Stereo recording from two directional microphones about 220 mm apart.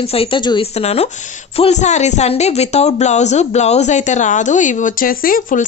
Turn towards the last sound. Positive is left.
turn(degrees=40)  # may be behind; listen again after turning